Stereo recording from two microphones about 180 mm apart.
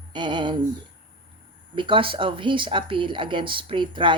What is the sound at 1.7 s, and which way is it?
Speech, 25° right (ahead or behind).